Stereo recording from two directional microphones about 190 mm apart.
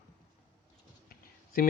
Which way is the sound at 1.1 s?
50° left (ahead or behind).